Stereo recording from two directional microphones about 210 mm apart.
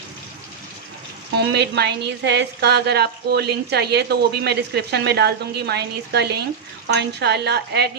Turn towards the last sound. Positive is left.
turn(degrees=-50)  # may be behind; listen again after turning